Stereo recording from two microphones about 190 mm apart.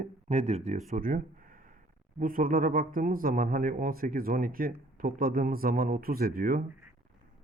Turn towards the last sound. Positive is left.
turn(degrees=-50)  # may be behind; listen again after turning